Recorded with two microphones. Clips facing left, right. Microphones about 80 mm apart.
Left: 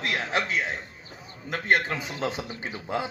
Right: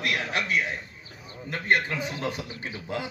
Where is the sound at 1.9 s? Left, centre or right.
Left.